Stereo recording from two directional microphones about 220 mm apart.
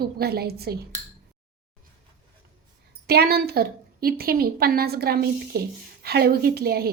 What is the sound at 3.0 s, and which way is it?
A woman's voice, 45° right (ahead or behind).